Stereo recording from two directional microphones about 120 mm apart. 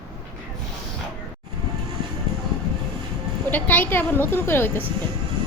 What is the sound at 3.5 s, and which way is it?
A woman's voice, 15° left (ahead or behind).